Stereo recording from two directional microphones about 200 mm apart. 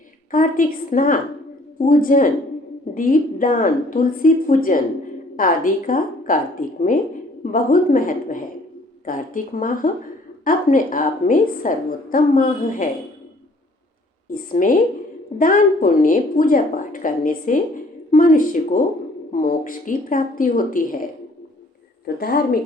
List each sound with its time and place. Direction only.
0.3 s a woman's voice: 45° left (ahead or behind)
14.5 s a woman's voice: 40° left (ahead or behind)